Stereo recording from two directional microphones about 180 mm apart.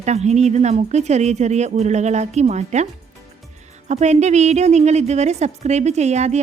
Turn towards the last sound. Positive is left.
turn(degrees=-40)  # may be behind; listen again after turning